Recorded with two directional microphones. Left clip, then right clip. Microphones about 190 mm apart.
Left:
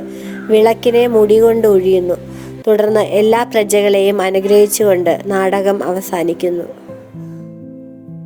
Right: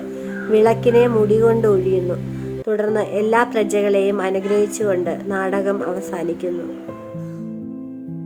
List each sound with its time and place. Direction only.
0.5 s a woman's voice: 20° left (ahead or behind)